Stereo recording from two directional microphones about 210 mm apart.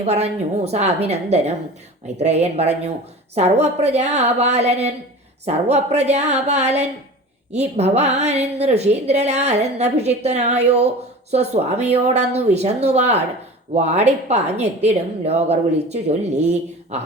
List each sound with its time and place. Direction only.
0.0 s a woman's voice: 30° right (ahead or behind)